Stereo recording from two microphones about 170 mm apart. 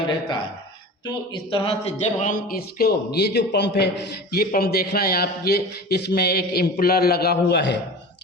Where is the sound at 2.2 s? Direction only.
60° left (ahead or behind); by 3.8 s 90° left.